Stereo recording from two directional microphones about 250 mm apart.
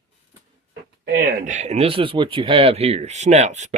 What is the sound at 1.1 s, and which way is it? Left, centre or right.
Speech, right.